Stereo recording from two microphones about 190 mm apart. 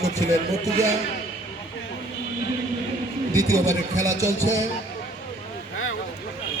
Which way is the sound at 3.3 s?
15° right (ahead or behind).